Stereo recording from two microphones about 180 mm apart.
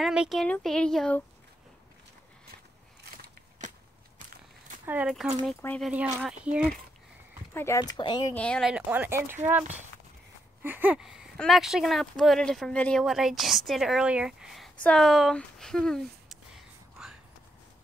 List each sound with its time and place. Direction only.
0.0 s speech: 5° right (ahead or behind)
4.8 s speech: 10° right (ahead or behind)
7.5 s speech: 15° left (ahead or behind)
8.4 s speech: 5° left (ahead or behind)